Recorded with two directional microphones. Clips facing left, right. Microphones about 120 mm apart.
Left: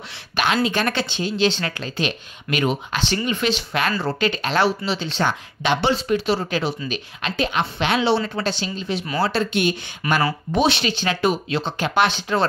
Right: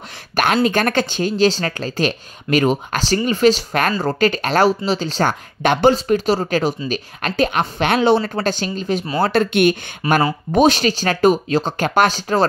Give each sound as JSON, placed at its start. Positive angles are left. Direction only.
{"t": 0.4, "sound": "speech", "side_deg": -50}